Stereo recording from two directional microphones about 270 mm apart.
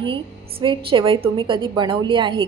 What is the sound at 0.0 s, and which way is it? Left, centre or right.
A woman's voice, centre.